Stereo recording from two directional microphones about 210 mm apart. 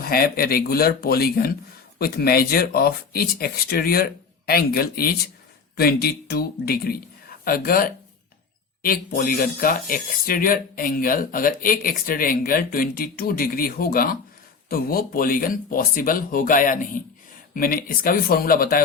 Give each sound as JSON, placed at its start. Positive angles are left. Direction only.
{"t": 0.0, "sound": "speech", "side_deg": 45}